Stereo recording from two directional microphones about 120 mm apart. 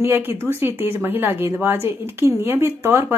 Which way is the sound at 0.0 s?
20° right (ahead or behind).